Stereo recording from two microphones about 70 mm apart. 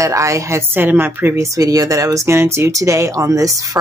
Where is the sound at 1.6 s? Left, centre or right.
Right.